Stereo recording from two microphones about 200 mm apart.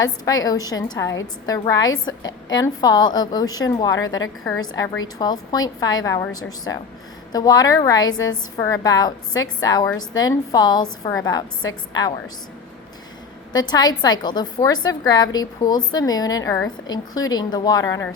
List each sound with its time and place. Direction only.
0.0 s a woman's voice: 20° left (ahead or behind)
5.1 s a woman's voice: 20° left (ahead or behind)
13.5 s a woman's voice: 20° left (ahead or behind)